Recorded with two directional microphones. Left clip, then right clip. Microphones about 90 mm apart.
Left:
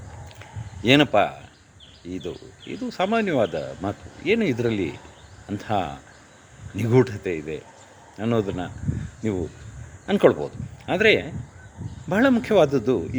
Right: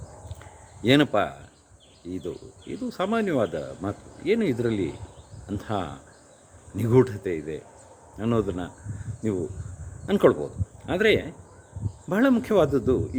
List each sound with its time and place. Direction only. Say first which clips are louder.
0.3 s a sound: left 4 dB; 15° right (ahead or behind)
2.0 s a man's voice: left 1 dB; 15° right (ahead or behind)
7.3 s speech: left 2 dB; 5° right (ahead or behind)
8.2 s a man's voice: left 2 dB; 25° right (ahead or behind)
10.1 s a man's voice: left 2 dB; 20° right (ahead or behind)